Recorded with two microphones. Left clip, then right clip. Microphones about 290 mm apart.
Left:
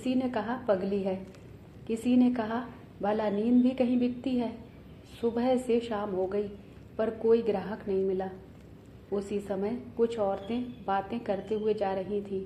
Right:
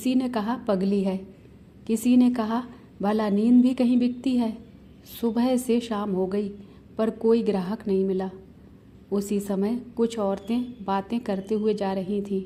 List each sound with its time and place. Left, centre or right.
0.0 s a woman's voice: right